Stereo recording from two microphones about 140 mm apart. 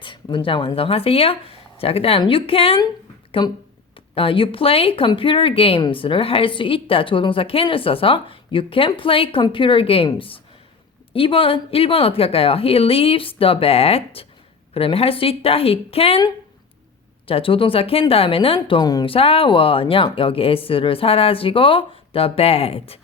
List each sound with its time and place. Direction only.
0.0 s a woman's voice: 35° left (ahead or behind)
17.2 s speech: 40° left (ahead or behind)
19.1 s speech: 40° left (ahead or behind)